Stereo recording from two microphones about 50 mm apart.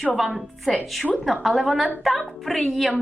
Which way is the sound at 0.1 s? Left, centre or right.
Centre.